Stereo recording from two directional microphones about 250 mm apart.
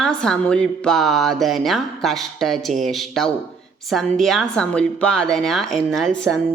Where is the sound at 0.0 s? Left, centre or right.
Centre.